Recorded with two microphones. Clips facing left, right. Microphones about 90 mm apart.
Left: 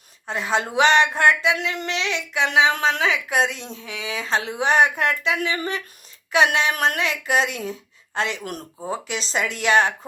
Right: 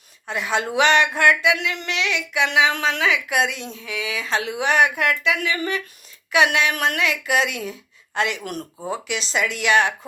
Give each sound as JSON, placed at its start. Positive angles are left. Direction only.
{"t": 0.3, "sound": "a woman's voice", "side_deg": 30}